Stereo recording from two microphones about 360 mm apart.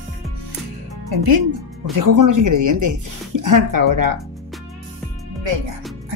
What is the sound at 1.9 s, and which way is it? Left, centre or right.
Speech, right.